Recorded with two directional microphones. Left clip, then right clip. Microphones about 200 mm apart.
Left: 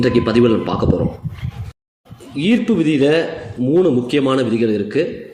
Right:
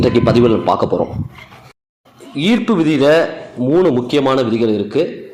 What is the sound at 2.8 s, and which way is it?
Speech, 45° right (ahead or behind).